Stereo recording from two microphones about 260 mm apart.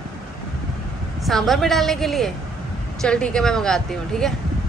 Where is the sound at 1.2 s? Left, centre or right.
Centre.